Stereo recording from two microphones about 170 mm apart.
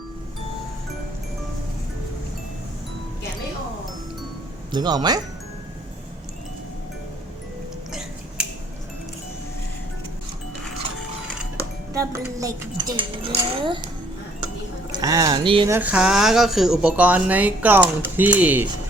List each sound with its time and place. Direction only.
4.7 s a child's voice: 25° right (ahead or behind)
11.9 s a child's voice: 20° right (ahead or behind)
14.9 s a child's voice: 20° right (ahead or behind)
15.7 s speech: 10° right (ahead or behind)